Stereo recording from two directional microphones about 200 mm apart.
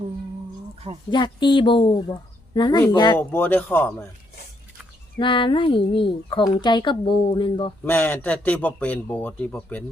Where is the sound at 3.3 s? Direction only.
10° left (ahead or behind).